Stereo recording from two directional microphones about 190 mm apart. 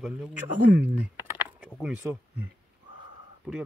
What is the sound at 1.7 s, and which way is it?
Speech, 5° left (ahead or behind).